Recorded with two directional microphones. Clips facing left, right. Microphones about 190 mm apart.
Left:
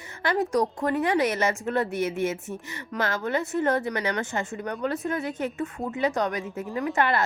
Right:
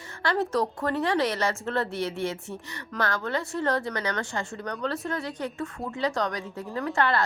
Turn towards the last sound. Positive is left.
turn(degrees=20)  # may be behind; listen again after turning